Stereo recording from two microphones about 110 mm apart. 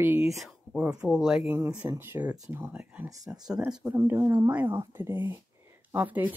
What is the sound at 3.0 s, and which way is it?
Speech, 30° right (ahead or behind).